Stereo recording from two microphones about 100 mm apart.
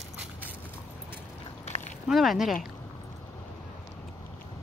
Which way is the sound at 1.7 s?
90° left.